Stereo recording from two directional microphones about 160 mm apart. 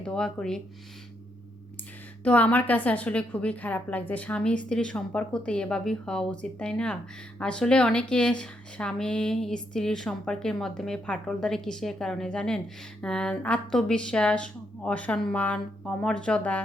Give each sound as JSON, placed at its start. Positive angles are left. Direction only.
{"t": 0.0, "sound": "speech", "side_deg": 5}
{"t": 2.2, "sound": "a woman's voice", "side_deg": 10}